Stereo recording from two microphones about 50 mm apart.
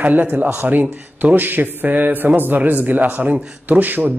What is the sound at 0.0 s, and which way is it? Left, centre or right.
A woman's voice, right.